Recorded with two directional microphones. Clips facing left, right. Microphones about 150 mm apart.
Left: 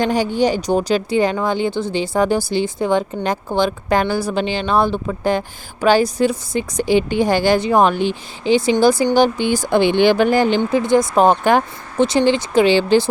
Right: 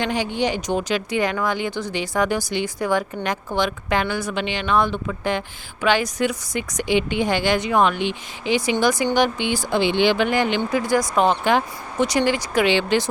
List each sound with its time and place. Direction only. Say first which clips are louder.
0.0 s speech: left 6 dB; 40° left (ahead or behind)
10.6 s speech: left 5 dB; 25° left (ahead or behind)
11.2 s speech: left 4 dB; 50° left (ahead or behind)
11.9 s speech: left 5 dB; 25° left (ahead or behind)